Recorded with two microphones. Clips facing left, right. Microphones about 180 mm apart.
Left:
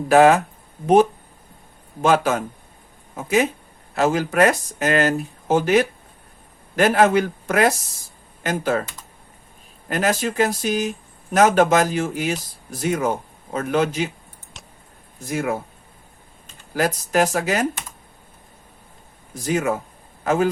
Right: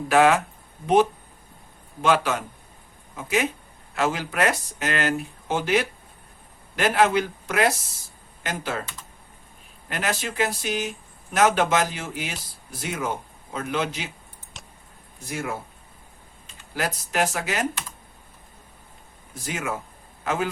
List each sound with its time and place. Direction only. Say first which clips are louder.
0.1 s speech: left 5 dB; 40° left (ahead or behind)
2.0 s speech: left 4 dB; 45° left (ahead or behind)
9.9 s speech: left 7 dB; 45° left (ahead or behind)
14.5 s a sound: even; centre (ahead or behind)
15.3 s speech: left 7 dB; 50° left (ahead or behind)
16.7 s speech: left 6 dB; 40° left (ahead or behind)
19.5 s speech: left 8 dB; 40° left (ahead or behind)